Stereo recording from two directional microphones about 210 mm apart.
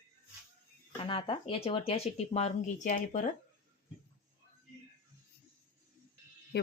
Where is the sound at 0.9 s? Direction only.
25° left (ahead or behind).